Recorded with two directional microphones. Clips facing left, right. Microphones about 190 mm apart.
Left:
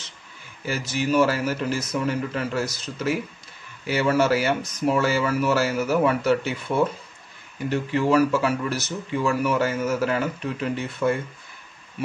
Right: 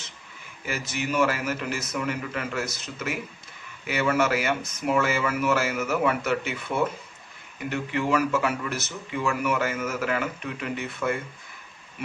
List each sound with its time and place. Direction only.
0.7 s speech: 30° left (ahead or behind)
7.7 s speech: 35° left (ahead or behind)